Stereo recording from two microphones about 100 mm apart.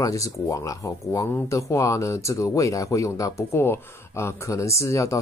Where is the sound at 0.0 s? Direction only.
35° left (ahead or behind).